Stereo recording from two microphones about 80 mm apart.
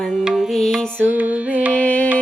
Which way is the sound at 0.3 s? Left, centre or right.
Centre.